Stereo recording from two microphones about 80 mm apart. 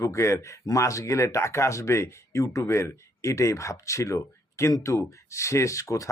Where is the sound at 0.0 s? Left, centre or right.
Left.